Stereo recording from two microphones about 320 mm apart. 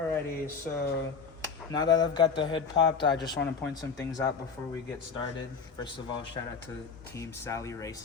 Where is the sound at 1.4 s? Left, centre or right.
Centre.